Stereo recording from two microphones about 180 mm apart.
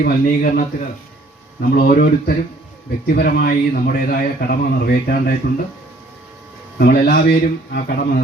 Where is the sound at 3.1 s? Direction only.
55° left (ahead or behind).